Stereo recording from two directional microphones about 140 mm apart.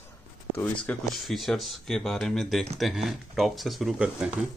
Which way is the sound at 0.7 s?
5° left (ahead or behind).